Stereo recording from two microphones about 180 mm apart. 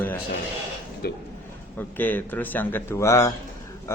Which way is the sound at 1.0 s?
60° left (ahead or behind).